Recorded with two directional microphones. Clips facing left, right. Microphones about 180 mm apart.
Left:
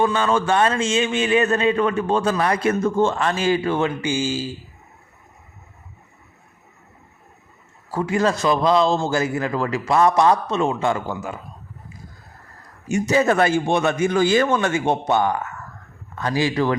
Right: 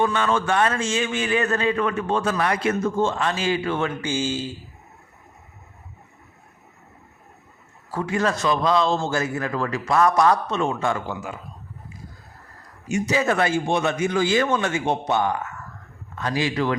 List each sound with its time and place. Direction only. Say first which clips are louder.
0.0 s a man's voice: left 2 dB; 30° left (ahead or behind)
2.8 s a man's voice: left 3 dB; 55° left (ahead or behind); by 3.9 s 35° left (ahead or behind)
4.0 s speech: left 2 dB; 10° left (ahead or behind)
7.9 s a man's voice: left 3 dB; 30° left (ahead or behind)
12.9 s a man's voice: left 4 dB; 45° left (ahead or behind)
16.4 s speech: left 3 dB; 35° left (ahead or behind)